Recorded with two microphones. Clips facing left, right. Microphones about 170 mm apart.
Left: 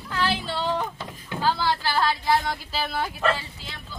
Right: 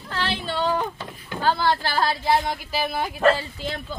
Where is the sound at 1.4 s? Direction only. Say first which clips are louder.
Right 3 dB; 50° right (ahead or behind).